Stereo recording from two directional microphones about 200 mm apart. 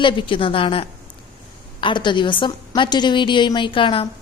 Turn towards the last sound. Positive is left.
turn(degrees=25)  # may be behind; listen again after turning